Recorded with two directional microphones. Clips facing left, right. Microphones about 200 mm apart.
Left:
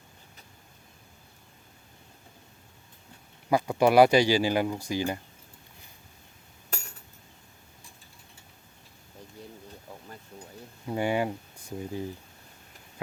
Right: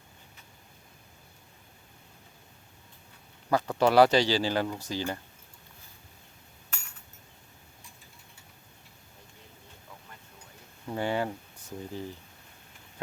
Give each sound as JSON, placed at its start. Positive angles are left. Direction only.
{"t": 3.5, "sound": "speech", "side_deg": 10}
{"t": 6.7, "sound": "a sound", "side_deg": 40}
{"t": 10.8, "sound": "speech", "side_deg": 15}